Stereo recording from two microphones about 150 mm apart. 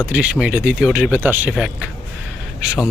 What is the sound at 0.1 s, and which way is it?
Speech, 5° right (ahead or behind).